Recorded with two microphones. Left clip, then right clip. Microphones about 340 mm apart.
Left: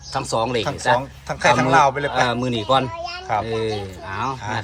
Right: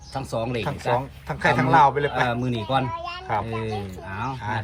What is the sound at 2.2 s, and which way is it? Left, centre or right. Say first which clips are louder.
Speech: left 5 dB; left.